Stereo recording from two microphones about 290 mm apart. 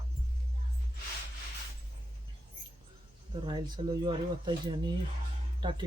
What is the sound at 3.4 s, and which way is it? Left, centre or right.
A man's voice, centre.